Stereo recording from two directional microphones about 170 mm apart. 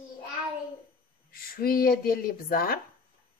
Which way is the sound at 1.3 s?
60° left (ahead or behind).